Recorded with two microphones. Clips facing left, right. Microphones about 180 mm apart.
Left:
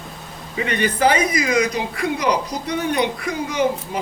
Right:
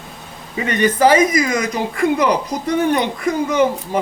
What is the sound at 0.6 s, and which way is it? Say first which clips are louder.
Speech: right 4 dB; 45° right (ahead or behind).